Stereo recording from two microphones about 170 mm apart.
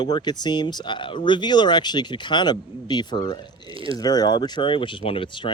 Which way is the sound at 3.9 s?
20° left (ahead or behind).